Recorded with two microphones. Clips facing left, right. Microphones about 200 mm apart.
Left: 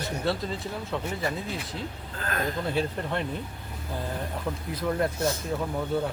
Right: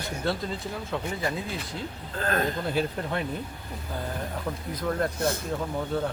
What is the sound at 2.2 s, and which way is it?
Speech, 35° right (ahead or behind).